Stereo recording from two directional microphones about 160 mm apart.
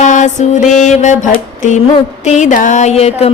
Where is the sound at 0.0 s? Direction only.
50° left (ahead or behind).